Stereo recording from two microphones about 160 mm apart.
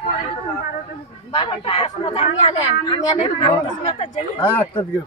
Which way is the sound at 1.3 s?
35° left (ahead or behind).